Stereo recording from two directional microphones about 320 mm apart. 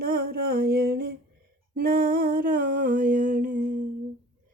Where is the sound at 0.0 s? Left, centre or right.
Right.